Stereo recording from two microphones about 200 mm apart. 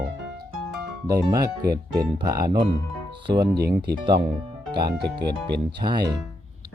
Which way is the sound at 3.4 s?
55° right (ahead or behind).